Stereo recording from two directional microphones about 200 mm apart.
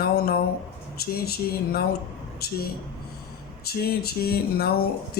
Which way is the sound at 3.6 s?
50° left (ahead or behind).